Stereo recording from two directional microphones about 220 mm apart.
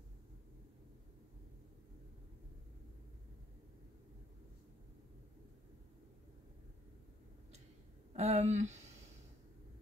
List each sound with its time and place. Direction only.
8.1 s speech: 30° right (ahead or behind)